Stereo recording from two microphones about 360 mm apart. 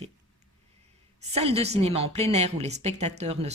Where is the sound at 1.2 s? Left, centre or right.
Centre.